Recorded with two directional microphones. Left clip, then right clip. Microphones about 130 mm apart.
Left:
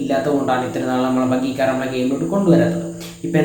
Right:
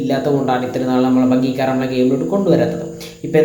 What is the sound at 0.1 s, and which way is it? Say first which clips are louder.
Speech: right 1 dB; 25° right (ahead or behind).